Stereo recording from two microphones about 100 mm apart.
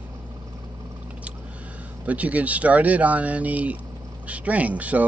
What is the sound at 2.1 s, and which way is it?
Speech, 15° right (ahead or behind).